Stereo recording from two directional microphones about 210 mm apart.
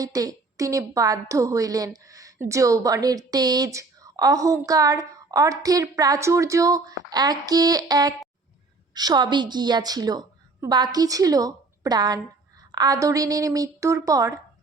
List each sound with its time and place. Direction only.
0.0 s a woman's voice: 15° right (ahead or behind)